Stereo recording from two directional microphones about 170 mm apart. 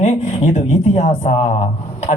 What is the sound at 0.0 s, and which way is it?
Speech, 40° left (ahead or behind).